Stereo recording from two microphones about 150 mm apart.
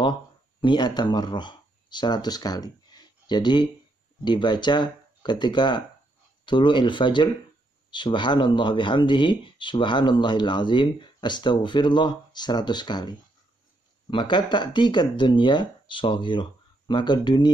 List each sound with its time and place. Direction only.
0.6 s speech: 30° left (ahead or behind)
14.1 s speech: 30° left (ahead or behind)